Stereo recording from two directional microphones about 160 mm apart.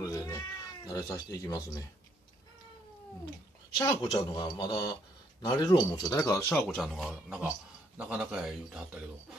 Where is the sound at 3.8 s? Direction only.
25° left (ahead or behind).